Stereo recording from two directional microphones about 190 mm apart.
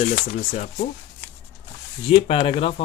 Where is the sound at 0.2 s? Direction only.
40° left (ahead or behind).